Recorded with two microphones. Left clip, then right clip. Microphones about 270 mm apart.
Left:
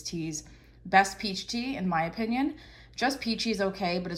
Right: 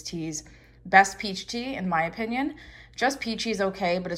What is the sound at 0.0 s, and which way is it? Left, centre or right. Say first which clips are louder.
Speech: right 2 dB; centre.